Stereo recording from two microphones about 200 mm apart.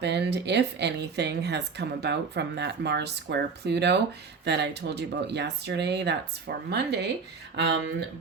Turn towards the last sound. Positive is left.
turn(degrees=-55)  # may be behind; listen again after turning